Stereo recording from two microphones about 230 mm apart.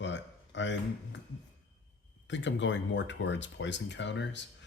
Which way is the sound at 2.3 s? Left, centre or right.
Left.